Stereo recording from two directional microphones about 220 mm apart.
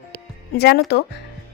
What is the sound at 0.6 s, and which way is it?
Speech, 50° left (ahead or behind).